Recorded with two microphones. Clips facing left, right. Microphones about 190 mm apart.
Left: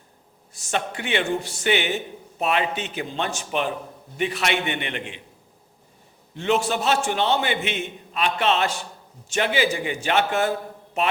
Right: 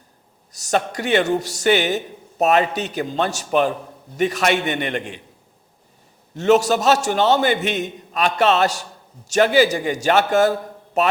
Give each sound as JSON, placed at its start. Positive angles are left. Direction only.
{"t": 0.5, "sound": "a man's voice", "side_deg": -40}
{"t": 6.3, "sound": "a man's voice", "side_deg": -40}